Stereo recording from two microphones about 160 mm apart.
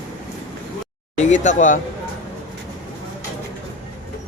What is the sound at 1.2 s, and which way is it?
Speech, 50° left (ahead or behind).